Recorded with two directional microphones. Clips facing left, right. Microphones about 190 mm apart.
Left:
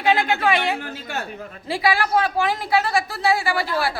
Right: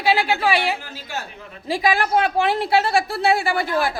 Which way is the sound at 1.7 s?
15° right (ahead or behind).